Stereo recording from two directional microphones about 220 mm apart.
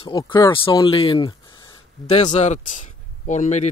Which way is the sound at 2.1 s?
30° left (ahead or behind).